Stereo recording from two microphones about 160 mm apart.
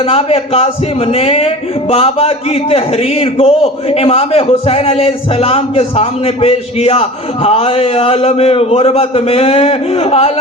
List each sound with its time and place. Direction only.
0.0 s speech: 40° left (ahead or behind)